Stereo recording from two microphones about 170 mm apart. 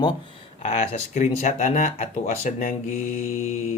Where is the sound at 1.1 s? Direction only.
50° left (ahead or behind).